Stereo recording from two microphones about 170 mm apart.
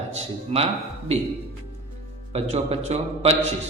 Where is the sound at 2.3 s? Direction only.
40° right (ahead or behind).